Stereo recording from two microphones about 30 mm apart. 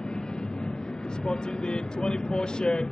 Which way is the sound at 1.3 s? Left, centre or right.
Left.